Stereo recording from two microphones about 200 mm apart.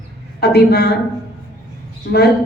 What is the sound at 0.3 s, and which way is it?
Speech, 55° left (ahead or behind).